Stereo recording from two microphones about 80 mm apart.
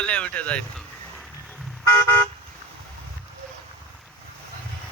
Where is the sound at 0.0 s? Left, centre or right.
Centre.